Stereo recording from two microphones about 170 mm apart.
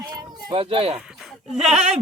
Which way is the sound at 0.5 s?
35° right (ahead or behind).